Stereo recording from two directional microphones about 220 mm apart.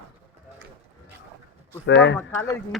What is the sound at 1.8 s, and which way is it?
Speech, 55° left (ahead or behind).